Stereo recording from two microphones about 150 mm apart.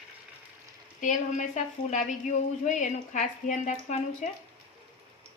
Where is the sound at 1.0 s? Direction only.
55° left (ahead or behind).